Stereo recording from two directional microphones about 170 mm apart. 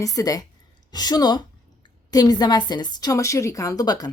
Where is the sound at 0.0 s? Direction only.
20° left (ahead or behind).